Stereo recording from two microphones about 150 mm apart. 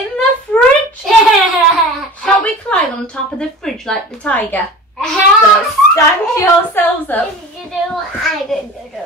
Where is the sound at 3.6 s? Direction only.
5° left (ahead or behind).